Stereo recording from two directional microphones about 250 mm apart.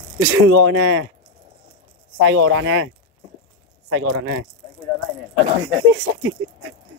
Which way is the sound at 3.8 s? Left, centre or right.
Right.